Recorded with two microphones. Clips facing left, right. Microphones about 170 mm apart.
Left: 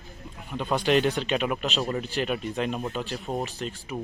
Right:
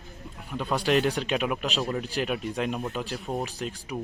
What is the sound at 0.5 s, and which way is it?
Speech, centre (ahead or behind).